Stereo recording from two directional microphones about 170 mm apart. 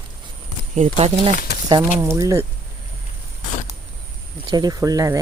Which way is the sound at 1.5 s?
75° left (ahead or behind).